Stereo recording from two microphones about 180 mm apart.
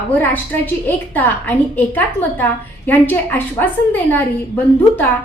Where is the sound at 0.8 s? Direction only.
10° left (ahead or behind).